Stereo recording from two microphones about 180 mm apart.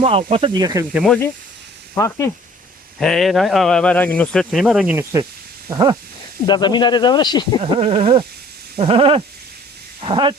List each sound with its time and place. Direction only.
0.0 s speech: 30° right (ahead or behind)
1.0 s speech: 5° left (ahead or behind)
2.0 s speech: 15° left (ahead or behind)
3.0 s speech: centre (ahead or behind)
5.6 s a sound: 20° right (ahead or behind)
6.4 s speech: 25° left (ahead or behind)
7.6 s speech: 30° right (ahead or behind)
10.0 s a sound: 30° right (ahead or behind)